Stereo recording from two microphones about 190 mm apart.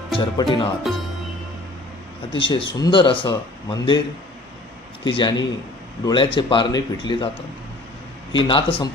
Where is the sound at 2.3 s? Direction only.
25° left (ahead or behind).